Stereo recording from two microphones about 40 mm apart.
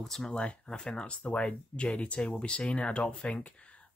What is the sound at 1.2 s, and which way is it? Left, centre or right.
Speech, left.